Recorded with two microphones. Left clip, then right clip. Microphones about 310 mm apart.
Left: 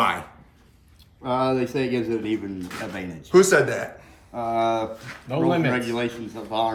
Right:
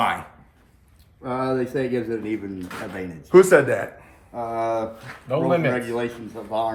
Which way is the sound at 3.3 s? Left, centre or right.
Centre.